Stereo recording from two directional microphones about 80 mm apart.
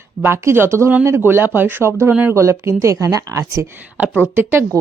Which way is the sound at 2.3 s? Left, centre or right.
Right.